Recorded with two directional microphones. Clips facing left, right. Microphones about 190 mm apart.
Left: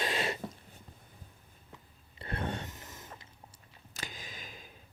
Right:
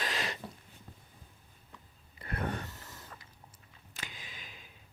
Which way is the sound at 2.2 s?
25° left (ahead or behind).